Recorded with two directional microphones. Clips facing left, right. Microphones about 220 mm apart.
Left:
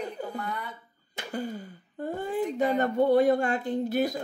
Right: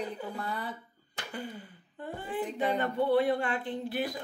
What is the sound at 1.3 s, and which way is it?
Speech, 40° left (ahead or behind).